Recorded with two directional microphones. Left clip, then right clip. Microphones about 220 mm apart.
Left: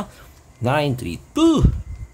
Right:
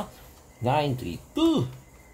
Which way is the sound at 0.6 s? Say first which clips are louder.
Left 5 dB; 20° left (ahead or behind).